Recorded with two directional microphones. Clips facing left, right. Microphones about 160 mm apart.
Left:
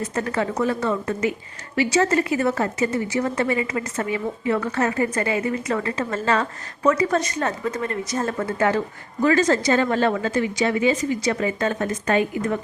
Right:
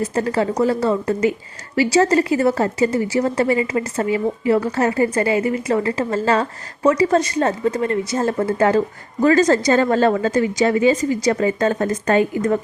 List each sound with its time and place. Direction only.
0.1 s a woman's voice: 30° right (ahead or behind)